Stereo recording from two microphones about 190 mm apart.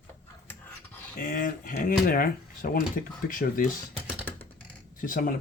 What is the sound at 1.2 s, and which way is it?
Speech, 45° left (ahead or behind).